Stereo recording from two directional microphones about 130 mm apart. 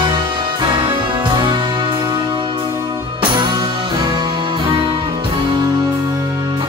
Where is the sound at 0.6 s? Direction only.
40° right (ahead or behind).